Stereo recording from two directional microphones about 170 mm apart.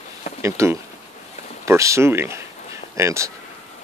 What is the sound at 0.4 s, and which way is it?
Speech, 15° right (ahead or behind).